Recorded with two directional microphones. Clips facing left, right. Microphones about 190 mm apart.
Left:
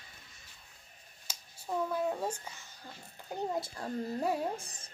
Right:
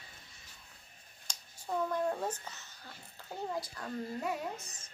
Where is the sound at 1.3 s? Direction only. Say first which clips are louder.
Even; 5° left (ahead or behind); by 4.9 s 30° left (ahead or behind).